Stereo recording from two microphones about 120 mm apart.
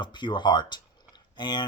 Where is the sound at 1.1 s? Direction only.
35° left (ahead or behind).